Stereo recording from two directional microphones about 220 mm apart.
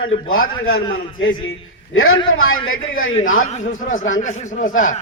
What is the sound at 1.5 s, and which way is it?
A man's voice, 70° left (ahead or behind).